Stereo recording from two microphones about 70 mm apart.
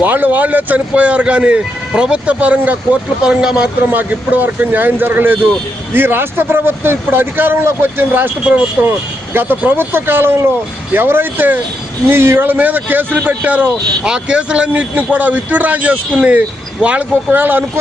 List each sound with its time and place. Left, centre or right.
0.0 s speech: right
3.9 s a man's voice: right